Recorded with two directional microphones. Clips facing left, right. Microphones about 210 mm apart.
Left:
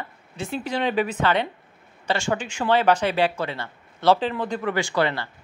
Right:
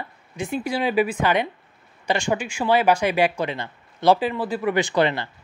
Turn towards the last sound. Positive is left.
turn(degrees=-20)  # may be behind; listen again after turning